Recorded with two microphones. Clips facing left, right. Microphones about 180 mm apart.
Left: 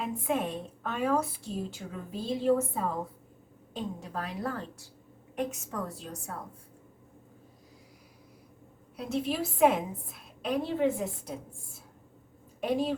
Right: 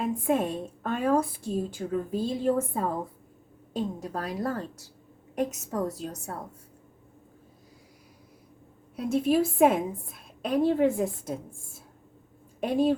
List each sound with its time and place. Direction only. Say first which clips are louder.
0.0 s a woman's voice: right 5 dB; 45° right (ahead or behind)
9.0 s a woman's voice: right 7 dB; 50° right (ahead or behind)
12.5 s a woman's voice: right 5 dB; 50° right (ahead or behind)